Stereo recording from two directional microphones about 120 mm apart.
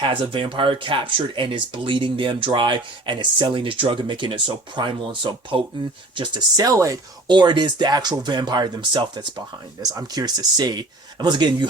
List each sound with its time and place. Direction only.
0.0 s speech: 45° right (ahead or behind)
6.1 s speech: 35° right (ahead or behind)
7.3 s speech: 40° right (ahead or behind)